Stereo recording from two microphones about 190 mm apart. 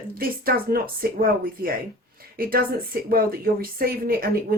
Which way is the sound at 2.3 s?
50° right (ahead or behind).